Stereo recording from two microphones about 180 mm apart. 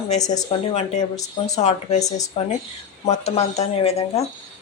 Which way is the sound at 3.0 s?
35° left (ahead or behind).